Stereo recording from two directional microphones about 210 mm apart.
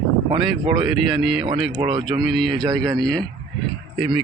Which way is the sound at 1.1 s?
Centre (ahead or behind).